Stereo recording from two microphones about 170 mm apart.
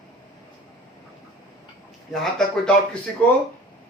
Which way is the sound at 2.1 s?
5° left (ahead or behind).